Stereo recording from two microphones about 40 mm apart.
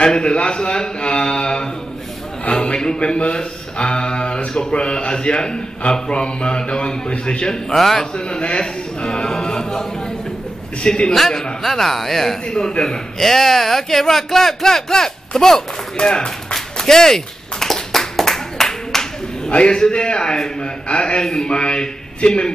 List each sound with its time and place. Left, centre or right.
0.0 s a man's voice: left
7.7 s a man's voice: centre
8.2 s a man's voice: left
11.1 s a man's voice: centre
16.0 s a man's voice: left
16.7 s clapping: centre
19.5 s a man's voice: left
21.2 s a man's voice: centre
21.5 s a man's voice: left